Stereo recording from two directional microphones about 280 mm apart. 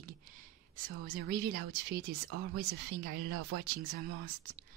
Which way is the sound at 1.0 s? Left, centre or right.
Right.